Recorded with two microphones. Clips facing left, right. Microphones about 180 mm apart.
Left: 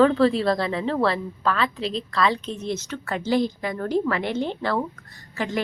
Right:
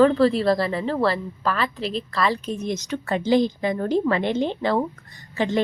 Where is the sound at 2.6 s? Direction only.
15° right (ahead or behind).